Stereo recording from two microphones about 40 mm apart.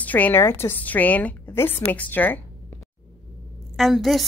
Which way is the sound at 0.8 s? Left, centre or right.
Left.